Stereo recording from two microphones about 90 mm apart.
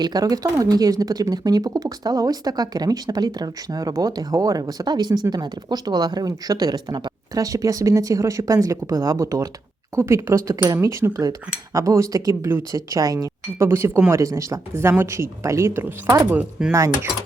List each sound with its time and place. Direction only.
0.0 s speech: 45° right (ahead or behind); by 12.6 s 30° right (ahead or behind)
12.7 s speech: 40° right (ahead or behind); by 16.6 s 15° right (ahead or behind)
16.7 s speech: 35° right (ahead or behind)